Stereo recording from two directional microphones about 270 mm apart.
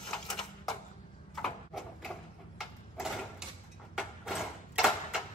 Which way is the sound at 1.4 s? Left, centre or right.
Centre.